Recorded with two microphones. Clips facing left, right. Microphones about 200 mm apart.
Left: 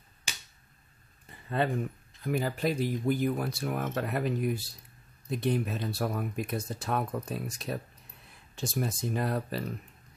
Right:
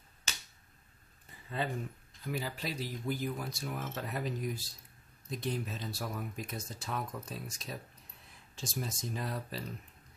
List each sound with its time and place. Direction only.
0.3 s finger snapping: 10° left (ahead or behind)
1.6 s speech: 65° left (ahead or behind)
2.2 s speech: 50° left (ahead or behind)